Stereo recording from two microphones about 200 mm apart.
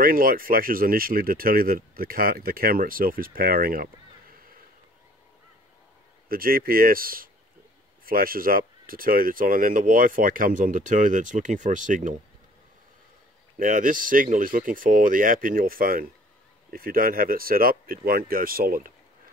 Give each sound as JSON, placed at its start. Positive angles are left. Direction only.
{"t": 0.0, "sound": "speech", "side_deg": -45}
{"t": 6.2, "sound": "speech", "side_deg": -45}
{"t": 13.6, "sound": "speech", "side_deg": -40}